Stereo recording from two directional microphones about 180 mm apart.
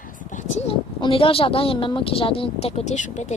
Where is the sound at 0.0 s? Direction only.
45° left (ahead or behind).